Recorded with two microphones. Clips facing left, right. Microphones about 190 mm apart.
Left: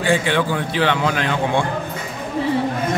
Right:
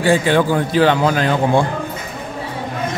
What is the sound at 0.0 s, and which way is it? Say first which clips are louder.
A man's voice: right 4 dB; 40° right (ahead or behind).